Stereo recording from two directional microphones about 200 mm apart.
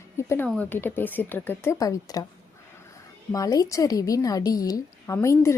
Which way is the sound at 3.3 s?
15° left (ahead or behind).